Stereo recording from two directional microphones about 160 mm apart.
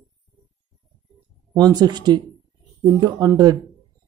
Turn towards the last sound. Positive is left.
turn(degrees=-25)  # may be behind; listen again after turning